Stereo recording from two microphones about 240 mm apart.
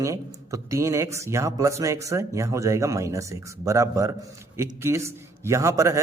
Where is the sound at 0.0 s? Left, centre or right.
Centre.